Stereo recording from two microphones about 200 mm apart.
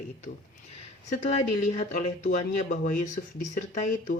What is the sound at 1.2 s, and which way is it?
Speech, 40° left (ahead or behind).